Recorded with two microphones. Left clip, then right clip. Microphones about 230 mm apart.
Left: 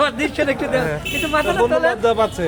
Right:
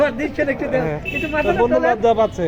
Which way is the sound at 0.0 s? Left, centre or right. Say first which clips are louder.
Even; centre.